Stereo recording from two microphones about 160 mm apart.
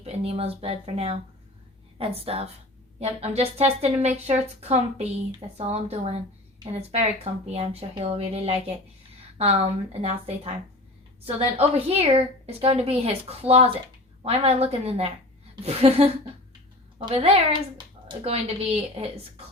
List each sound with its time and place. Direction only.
0.0 s a woman's voice: 40° right (ahead or behind)
7.5 s a woman's voice: 40° right (ahead or behind)